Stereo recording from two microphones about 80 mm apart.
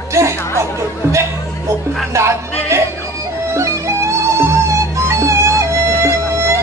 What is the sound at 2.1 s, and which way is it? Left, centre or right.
Music, right.